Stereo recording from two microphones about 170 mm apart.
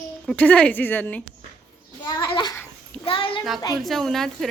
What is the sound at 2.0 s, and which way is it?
A child's voice, 25° left (ahead or behind).